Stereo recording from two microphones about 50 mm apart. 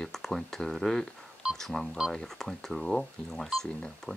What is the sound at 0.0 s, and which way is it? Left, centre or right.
Speech, centre.